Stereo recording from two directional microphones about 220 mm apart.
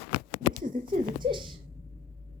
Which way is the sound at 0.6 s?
35° right (ahead or behind).